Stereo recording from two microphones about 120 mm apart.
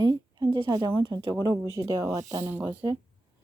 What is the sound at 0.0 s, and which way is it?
Speech, 35° right (ahead or behind).